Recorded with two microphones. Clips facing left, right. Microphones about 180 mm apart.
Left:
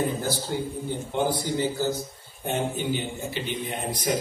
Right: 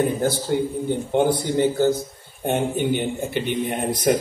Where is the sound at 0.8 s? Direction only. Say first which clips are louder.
Right 6 dB; 60° right (ahead or behind).